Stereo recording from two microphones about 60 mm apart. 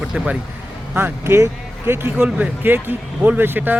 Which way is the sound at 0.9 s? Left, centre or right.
Right.